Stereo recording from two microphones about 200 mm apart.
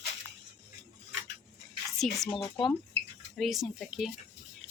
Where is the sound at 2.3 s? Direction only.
25° left (ahead or behind).